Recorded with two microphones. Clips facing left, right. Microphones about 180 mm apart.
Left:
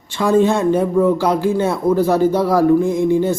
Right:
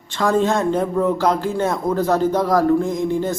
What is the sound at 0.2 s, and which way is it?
Speech, 15° left (ahead or behind).